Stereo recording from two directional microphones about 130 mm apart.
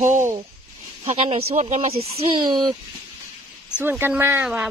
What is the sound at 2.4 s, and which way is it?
Speech, 35° right (ahead or behind).